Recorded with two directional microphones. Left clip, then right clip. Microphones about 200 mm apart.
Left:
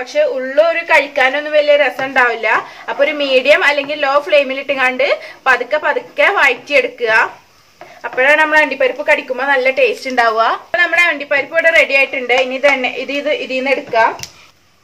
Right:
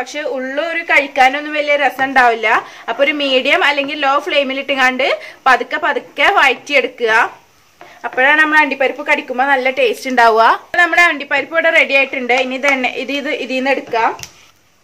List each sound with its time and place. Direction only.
0.0 s speech: 50° right (ahead or behind)